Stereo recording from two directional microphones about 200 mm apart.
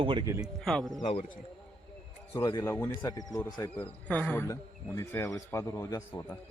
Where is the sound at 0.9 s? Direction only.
25° left (ahead or behind).